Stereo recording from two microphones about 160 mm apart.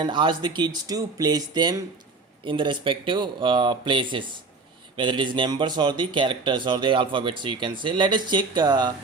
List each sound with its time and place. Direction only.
0.0 s speech: 30° right (ahead or behind)